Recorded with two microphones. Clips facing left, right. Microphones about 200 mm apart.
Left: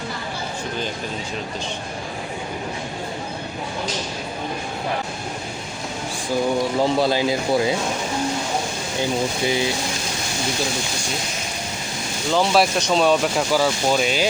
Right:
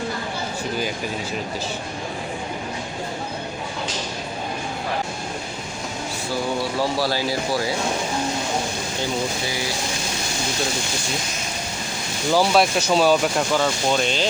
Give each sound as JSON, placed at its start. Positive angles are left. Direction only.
{"t": 6.6, "sound": "speech", "side_deg": 20}
{"t": 12.3, "sound": "speech", "side_deg": -5}